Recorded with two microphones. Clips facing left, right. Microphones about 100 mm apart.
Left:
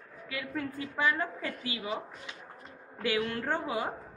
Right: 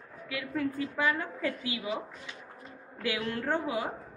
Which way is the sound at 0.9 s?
5° right (ahead or behind).